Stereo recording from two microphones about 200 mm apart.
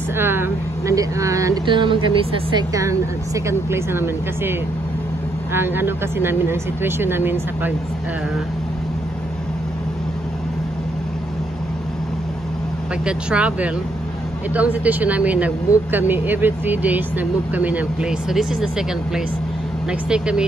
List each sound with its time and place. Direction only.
0.2 s speech: 10° right (ahead or behind)
13.0 s speech: 5° right (ahead or behind)